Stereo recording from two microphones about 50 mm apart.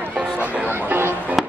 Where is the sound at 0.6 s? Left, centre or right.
Right.